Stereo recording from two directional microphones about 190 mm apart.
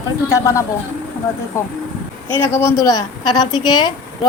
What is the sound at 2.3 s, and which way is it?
A woman's voice, 15° left (ahead or behind).